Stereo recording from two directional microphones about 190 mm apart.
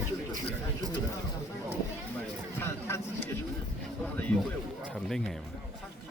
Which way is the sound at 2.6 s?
15° left (ahead or behind).